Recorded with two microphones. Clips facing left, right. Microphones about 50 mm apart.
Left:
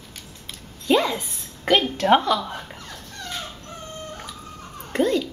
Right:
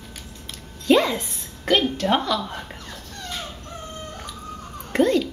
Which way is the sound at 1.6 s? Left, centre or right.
Left.